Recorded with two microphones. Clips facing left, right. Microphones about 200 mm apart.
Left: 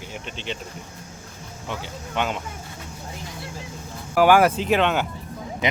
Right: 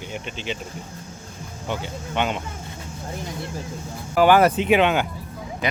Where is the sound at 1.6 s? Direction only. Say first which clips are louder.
Right 4 dB; centre (ahead or behind).